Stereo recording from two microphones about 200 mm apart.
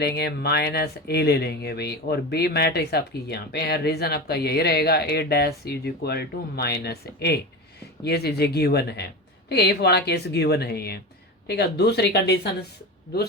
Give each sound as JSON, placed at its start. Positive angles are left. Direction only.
{"t": 0.0, "sound": "speech", "side_deg": 55}